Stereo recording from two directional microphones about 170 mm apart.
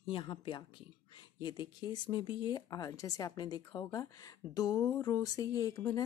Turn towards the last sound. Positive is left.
turn(degrees=20)  # may be behind; listen again after turning